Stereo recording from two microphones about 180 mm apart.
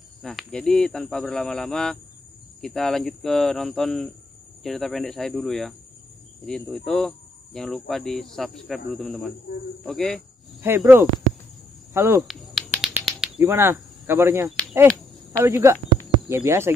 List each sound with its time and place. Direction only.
0.2 s speech: centre (ahead or behind)
10.6 s speech: 10° right (ahead or behind)
12.2 s a sound: centre (ahead or behind)
13.5 s speech: 15° right (ahead or behind)